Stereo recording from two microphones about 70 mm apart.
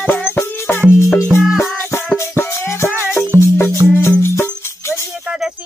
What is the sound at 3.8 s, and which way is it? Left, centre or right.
Music, centre.